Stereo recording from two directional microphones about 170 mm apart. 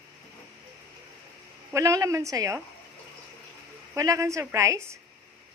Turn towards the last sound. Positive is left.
turn(degrees=-15)  # may be behind; listen again after turning